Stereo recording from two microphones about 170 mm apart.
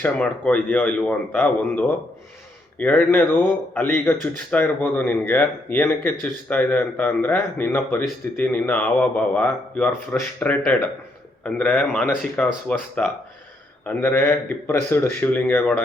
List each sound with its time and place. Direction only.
0.0 s speech: 10° left (ahead or behind)